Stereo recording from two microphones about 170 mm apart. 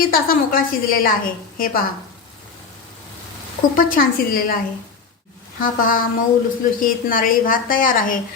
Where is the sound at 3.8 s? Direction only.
55° left (ahead or behind).